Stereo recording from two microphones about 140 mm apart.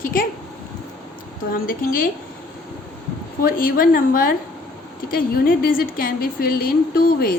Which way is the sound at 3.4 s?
90° left.